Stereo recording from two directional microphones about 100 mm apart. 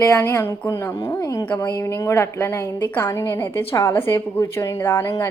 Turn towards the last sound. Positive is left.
turn(degrees=20)  # may be behind; listen again after turning